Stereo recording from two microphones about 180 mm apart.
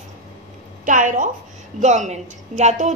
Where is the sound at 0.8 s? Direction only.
45° right (ahead or behind).